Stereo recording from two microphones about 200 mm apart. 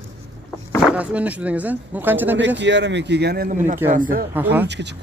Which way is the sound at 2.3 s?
65° right (ahead or behind).